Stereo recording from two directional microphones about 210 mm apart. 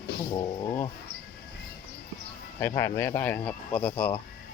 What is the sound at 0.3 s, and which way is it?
Speech, 20° left (ahead or behind).